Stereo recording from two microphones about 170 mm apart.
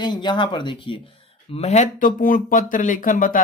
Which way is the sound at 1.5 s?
40° left (ahead or behind).